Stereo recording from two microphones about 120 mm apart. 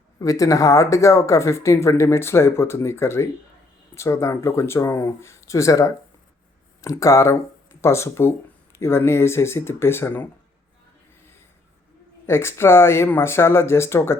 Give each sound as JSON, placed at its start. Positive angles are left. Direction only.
{"t": 0.2, "sound": "speech", "side_deg": 30}
{"t": 12.2, "sound": "speech", "side_deg": 20}